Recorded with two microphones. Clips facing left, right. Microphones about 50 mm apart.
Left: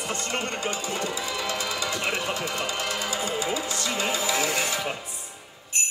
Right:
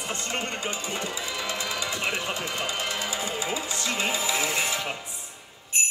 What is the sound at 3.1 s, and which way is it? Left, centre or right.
Music, left.